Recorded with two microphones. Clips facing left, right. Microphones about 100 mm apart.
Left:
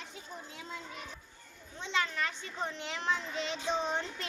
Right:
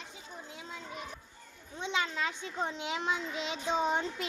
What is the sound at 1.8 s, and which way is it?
A child's voice, 20° right (ahead or behind).